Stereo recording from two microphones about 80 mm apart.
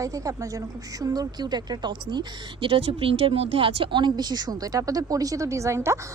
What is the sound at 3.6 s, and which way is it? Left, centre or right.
A woman's voice, right.